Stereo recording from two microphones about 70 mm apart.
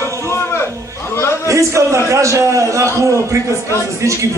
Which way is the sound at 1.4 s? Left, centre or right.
Right.